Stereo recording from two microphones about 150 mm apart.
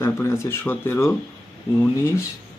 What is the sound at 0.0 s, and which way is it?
Speech, 20° left (ahead or behind).